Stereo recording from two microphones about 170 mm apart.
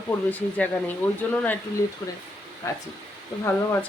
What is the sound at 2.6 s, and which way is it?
Speech, 15° left (ahead or behind).